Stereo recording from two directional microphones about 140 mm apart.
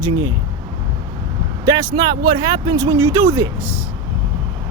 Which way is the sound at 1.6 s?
25° right (ahead or behind).